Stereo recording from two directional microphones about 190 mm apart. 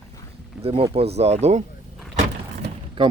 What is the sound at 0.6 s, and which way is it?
Speech, 30° right (ahead or behind).